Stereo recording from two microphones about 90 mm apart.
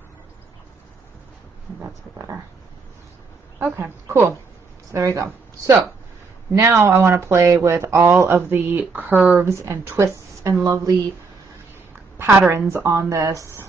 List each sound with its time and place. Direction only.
3.5 s a woman's voice: 25° right (ahead or behind)
9.5 s a woman's voice: 30° right (ahead or behind)
12.3 s a woman's voice: 30° right (ahead or behind)